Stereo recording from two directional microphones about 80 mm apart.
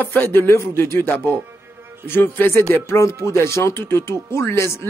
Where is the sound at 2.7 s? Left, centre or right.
Left.